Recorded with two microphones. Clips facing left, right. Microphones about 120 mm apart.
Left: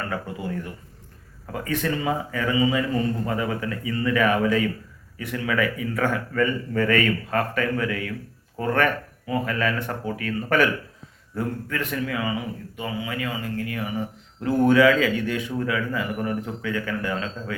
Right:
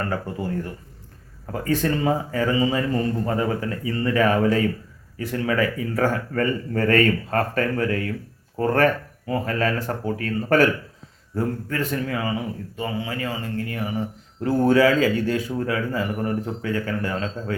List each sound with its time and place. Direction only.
0.1 s a man's voice: 35° right (ahead or behind)
1.5 s a man's voice: 35° right (ahead or behind)